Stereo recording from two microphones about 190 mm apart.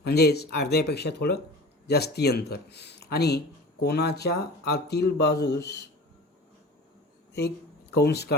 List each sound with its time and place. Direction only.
0.0 s speech: 60° left (ahead or behind)
7.9 s speech: 60° left (ahead or behind)